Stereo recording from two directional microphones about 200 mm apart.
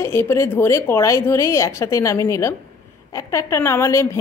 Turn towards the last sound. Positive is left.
turn(degrees=15)  # may be behind; listen again after turning